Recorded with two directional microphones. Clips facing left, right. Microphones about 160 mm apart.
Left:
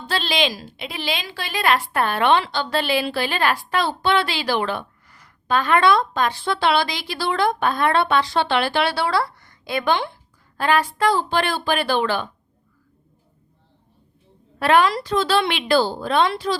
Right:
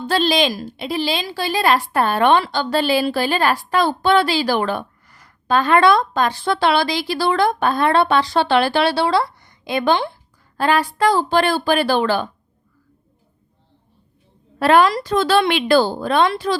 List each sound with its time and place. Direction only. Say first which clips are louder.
0.1 s a woman's voice: right 5 dB; 45° right (ahead or behind); by 9.8 s 20° right (ahead or behind)
9.8 s a woman's voice: right 4 dB; 35° right (ahead or behind)
14.6 s speech: right 3 dB; 40° right (ahead or behind)